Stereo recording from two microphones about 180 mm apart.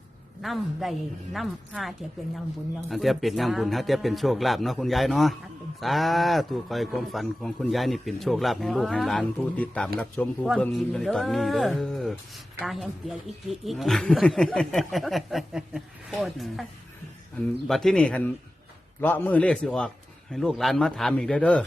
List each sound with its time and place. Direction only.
0.4 s speech: centre (ahead or behind)
17.7 s a man's voice: centre (ahead or behind)